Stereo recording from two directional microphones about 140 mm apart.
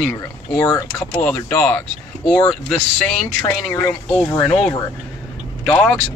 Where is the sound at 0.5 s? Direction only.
25° left (ahead or behind).